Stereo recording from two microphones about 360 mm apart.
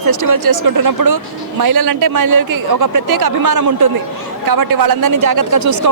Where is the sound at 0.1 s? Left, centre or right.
Right.